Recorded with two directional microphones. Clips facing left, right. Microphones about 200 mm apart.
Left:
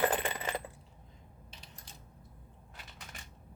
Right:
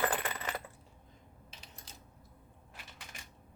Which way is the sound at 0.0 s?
25° left (ahead or behind).